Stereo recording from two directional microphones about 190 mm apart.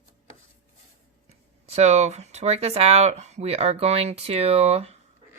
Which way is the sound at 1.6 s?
35° right (ahead or behind).